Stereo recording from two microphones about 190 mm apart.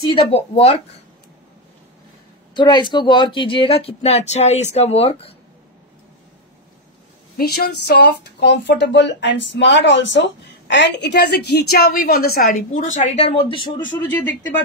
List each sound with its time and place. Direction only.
0.0 s speech: 30° left (ahead or behind)
2.5 s speech: 25° left (ahead or behind)
7.3 s speech: 55° left (ahead or behind); by 13.7 s 25° left (ahead or behind)